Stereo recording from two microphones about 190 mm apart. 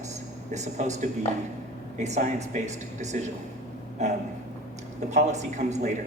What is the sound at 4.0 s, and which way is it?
Speech, 35° right (ahead or behind).